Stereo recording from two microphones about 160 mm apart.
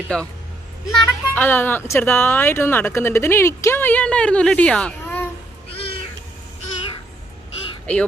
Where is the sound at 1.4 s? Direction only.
10° left (ahead or behind).